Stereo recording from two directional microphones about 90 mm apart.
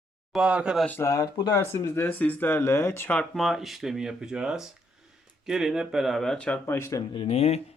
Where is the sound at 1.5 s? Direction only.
30° left (ahead or behind).